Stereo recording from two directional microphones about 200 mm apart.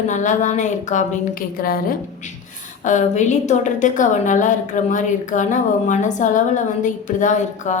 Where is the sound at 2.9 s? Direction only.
40° left (ahead or behind).